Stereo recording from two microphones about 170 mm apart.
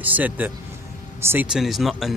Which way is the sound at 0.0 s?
10° right (ahead or behind).